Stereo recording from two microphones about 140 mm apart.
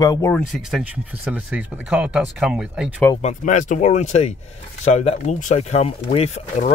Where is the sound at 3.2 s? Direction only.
55° left (ahead or behind).